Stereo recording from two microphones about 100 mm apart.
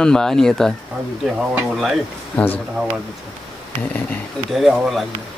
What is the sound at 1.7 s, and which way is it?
Speech, centre (ahead or behind).